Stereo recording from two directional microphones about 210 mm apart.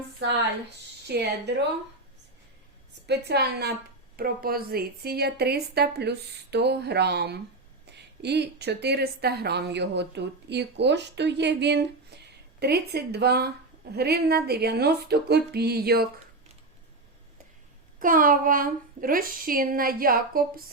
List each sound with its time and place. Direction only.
0.2 s a woman's voice: 55° right (ahead or behind)
3.1 s a woman's voice: 50° right (ahead or behind)
18.0 s a woman's voice: 40° right (ahead or behind)